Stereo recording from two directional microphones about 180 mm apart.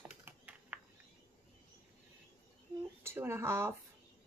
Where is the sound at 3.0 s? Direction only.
15° right (ahead or behind).